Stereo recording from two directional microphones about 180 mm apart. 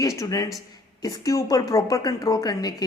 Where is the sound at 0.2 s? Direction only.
20° left (ahead or behind).